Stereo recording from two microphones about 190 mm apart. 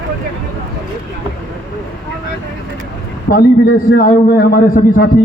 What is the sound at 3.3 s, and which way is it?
A man's voice, 50° left (ahead or behind).